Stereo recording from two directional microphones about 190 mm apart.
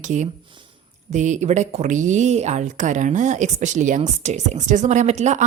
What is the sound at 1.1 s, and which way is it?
Speech, 40° right (ahead or behind).